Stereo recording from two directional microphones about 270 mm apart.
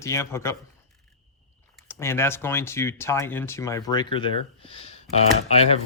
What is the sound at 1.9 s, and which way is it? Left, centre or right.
Speech, centre.